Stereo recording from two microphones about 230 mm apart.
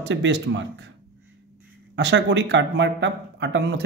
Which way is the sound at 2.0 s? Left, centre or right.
Right.